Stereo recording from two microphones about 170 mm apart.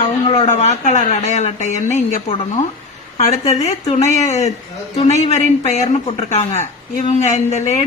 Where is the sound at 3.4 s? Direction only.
40° left (ahead or behind).